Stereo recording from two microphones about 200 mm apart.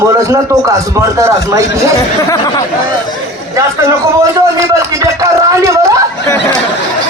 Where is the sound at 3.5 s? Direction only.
15° right (ahead or behind).